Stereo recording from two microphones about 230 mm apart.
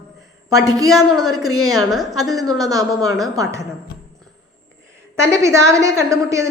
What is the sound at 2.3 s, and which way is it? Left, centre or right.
A woman's voice, centre.